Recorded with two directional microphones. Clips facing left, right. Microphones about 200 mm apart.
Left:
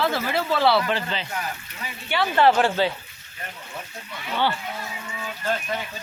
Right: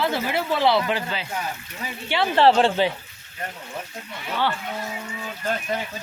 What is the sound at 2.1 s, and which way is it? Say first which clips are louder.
Speech: right 1 dB; 25° right (ahead or behind).